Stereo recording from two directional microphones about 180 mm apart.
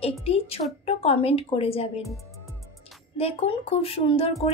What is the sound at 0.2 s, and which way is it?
Speech, 35° left (ahead or behind).